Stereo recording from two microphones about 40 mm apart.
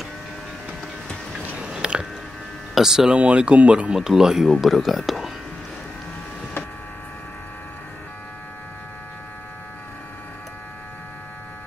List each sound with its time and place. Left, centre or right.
1.6 s biting: right
2.7 s speech: centre
3.2 s speech: right
3.9 s speech: centre
4.5 s speech: centre